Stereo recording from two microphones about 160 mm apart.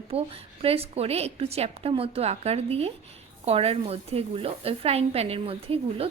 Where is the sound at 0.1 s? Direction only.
35° right (ahead or behind).